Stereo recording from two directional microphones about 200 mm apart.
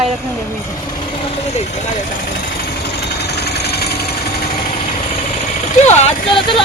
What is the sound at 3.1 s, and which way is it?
Engine, 55° left (ahead or behind).